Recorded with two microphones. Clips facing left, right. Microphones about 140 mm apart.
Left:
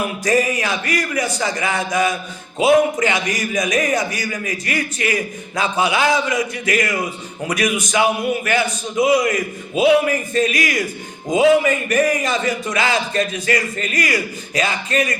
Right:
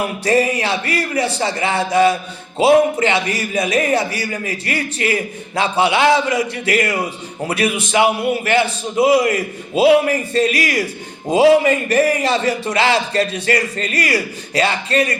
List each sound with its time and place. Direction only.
0.3 s a man's voice: 30° right (ahead or behind)